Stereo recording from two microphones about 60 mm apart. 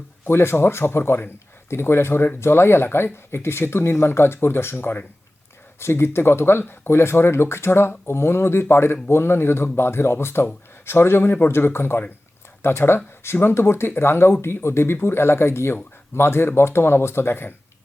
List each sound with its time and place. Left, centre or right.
0.3 s speech: left